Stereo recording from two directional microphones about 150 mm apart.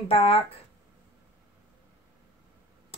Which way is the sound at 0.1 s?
40° left (ahead or behind).